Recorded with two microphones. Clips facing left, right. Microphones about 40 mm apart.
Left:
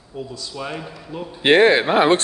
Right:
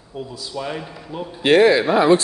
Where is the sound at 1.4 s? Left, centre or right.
Left.